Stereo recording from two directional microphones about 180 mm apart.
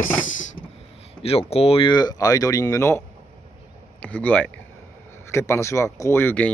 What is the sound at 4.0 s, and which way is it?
Speech, 10° left (ahead or behind).